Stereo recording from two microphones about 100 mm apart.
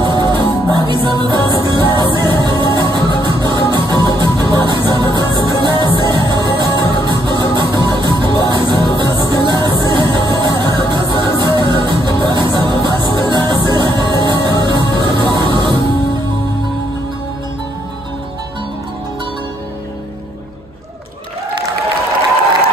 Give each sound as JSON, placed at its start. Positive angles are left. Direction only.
{"t": 0.0, "sound": "music", "side_deg": -50}